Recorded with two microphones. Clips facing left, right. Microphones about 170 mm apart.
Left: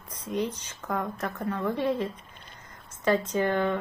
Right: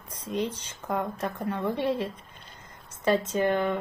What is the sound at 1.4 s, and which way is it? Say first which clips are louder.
Speech: left 1 dB; 25° right (ahead or behind).